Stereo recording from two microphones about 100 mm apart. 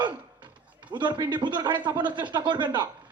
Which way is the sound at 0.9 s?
50° right (ahead or behind).